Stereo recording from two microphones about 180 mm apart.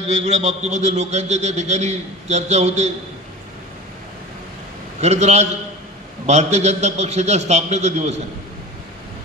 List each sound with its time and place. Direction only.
0.1 s a man's voice: 40° right (ahead or behind)
5.0 s a man's voice: 40° right (ahead or behind)